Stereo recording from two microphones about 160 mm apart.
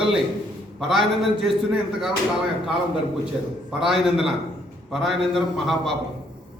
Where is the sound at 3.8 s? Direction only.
5° right (ahead or behind).